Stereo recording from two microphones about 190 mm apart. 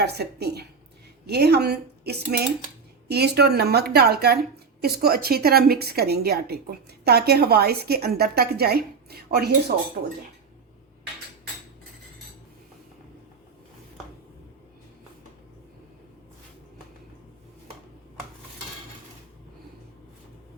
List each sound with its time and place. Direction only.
0.0 s a woman's voice: 60° right (ahead or behind)